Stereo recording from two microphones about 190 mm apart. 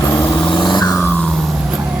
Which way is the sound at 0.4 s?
25° left (ahead or behind).